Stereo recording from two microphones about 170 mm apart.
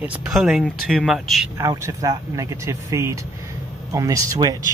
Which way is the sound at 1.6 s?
20° right (ahead or behind).